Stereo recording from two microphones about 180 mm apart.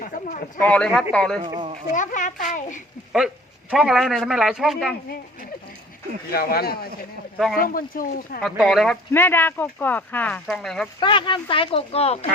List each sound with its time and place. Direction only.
0.0 s a sound: 45° left (ahead or behind)
0.6 s a man's voice: 5° left (ahead or behind)
1.4 s speech: 25° right (ahead or behind)
1.9 s a child's voice: 45° left (ahead or behind)
3.1 s a man's voice: centre (ahead or behind)
6.3 s a child's voice: 60° left (ahead or behind)
8.4 s a man's voice: centre (ahead or behind)
9.1 s speech: 10° left (ahead or behind)
11.0 s speech: 25° left (ahead or behind)